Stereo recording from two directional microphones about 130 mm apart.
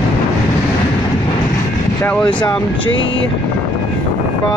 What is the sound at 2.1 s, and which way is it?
Speech, 10° left (ahead or behind).